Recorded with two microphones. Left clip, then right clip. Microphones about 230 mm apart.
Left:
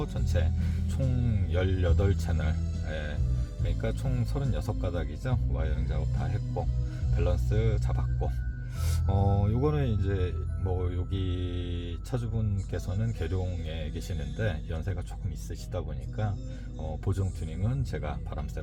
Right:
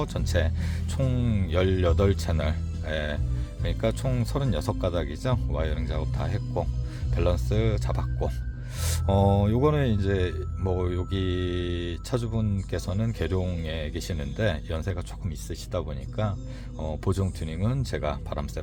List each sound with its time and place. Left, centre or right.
0.0 s music: right
0.9 s speech: right
17.1 s speech: right